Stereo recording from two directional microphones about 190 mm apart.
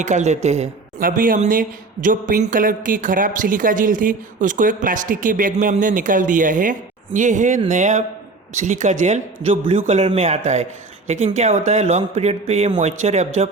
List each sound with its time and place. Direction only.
0.0 s speech: 40° right (ahead or behind)